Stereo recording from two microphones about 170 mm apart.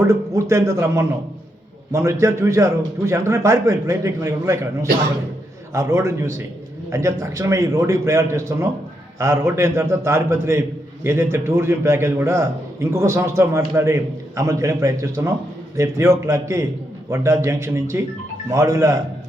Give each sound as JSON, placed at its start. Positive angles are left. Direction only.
{"t": 0.0, "sound": "a man's voice", "side_deg": -20}